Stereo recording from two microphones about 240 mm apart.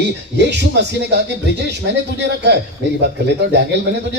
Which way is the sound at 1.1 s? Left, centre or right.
Right.